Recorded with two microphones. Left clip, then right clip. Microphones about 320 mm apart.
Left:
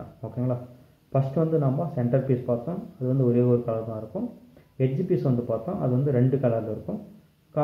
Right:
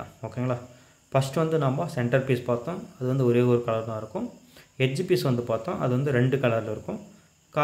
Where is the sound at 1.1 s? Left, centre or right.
Right.